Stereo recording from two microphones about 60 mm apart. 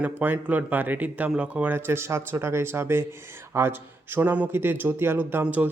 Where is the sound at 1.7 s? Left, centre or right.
Right.